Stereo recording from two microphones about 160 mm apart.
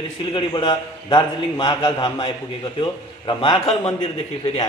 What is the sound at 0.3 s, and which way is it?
A man's voice, 30° left (ahead or behind).